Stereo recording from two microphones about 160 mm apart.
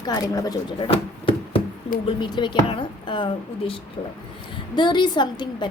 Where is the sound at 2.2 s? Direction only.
30° left (ahead or behind).